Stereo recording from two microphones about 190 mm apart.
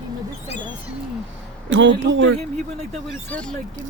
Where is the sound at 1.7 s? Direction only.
75° right (ahead or behind).